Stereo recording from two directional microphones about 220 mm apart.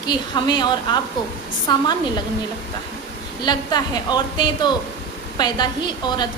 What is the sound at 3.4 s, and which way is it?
Speech, 20° left (ahead or behind).